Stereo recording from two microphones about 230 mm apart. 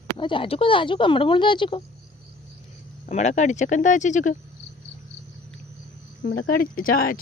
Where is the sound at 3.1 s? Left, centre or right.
Left.